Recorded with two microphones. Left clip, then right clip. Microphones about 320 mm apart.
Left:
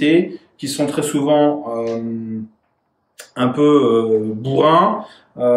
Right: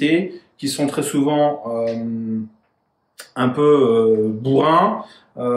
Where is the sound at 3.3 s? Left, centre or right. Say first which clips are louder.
Left 1 dB; centre.